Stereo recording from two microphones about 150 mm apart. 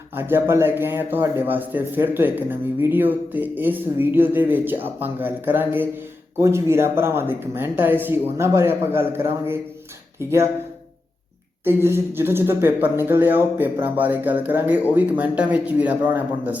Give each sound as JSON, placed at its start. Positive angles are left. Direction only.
{"t": 0.2, "sound": "a man's voice", "side_deg": -15}
{"t": 11.6, "sound": "a man's voice", "side_deg": -15}